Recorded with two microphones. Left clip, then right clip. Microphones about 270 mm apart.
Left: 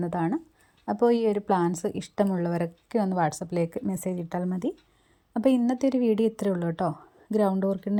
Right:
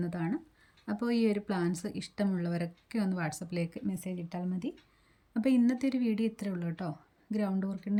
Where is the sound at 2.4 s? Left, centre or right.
Left.